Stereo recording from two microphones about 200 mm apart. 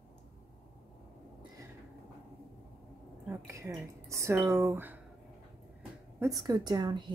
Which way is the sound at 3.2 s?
15° right (ahead or behind).